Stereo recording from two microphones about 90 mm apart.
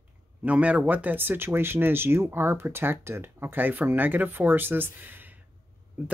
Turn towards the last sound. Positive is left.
turn(degrees=-20)  # may be behind; listen again after turning